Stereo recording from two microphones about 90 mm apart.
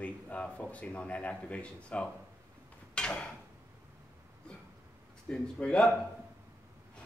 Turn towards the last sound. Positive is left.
turn(degrees=10)  # may be behind; listen again after turning